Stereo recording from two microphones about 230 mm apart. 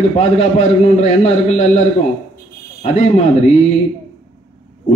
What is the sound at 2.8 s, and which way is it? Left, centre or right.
Speech, left.